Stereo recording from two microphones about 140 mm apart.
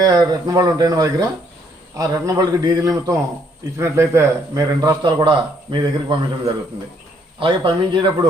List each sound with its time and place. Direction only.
0.0 s a man's voice: 25° right (ahead or behind)
7.3 s a man's voice: 35° right (ahead or behind)